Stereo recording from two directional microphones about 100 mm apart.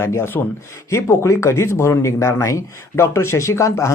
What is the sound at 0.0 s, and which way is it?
Speech, 25° left (ahead or behind).